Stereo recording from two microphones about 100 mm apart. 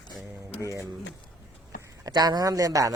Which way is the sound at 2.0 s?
45° right (ahead or behind).